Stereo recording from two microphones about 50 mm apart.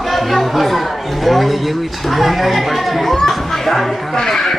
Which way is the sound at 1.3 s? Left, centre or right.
Centre.